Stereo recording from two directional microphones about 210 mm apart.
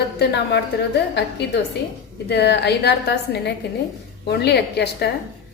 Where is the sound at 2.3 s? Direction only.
50° left (ahead or behind).